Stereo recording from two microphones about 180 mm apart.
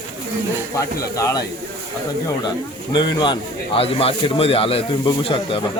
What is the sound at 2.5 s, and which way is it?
Speech, 25° left (ahead or behind).